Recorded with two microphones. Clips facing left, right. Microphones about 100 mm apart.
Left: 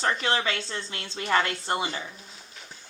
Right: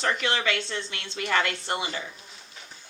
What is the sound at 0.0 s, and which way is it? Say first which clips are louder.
Speech: even; 35° left (ahead or behind).